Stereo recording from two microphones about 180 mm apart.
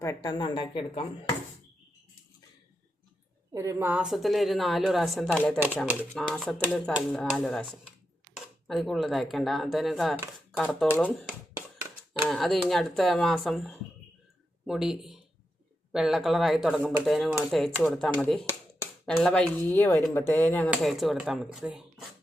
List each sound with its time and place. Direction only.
0.0 s speech: 20° left (ahead or behind)
3.5 s speech: 15° right (ahead or behind); by 11.3 s 10° left (ahead or behind)
12.3 s speech: centre (ahead or behind)
20.9 s speech: centre (ahead or behind)